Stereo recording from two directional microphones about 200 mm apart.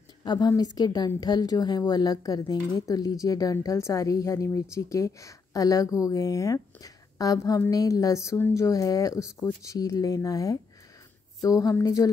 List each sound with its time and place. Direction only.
0.2 s a woman's voice: 20° left (ahead or behind)